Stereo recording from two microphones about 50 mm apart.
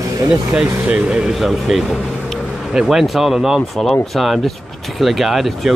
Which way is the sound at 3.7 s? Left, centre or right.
Centre.